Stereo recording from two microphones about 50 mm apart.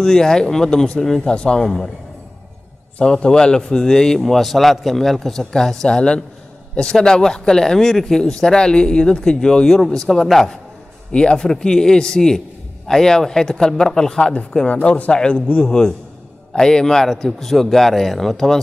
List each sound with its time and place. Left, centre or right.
0.0 s speech: centre
1.6 s speech: centre
3.0 s speech: centre
11.1 s speech: centre